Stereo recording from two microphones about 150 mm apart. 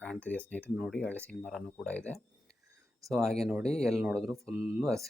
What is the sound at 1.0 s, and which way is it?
Speech, 10° left (ahead or behind).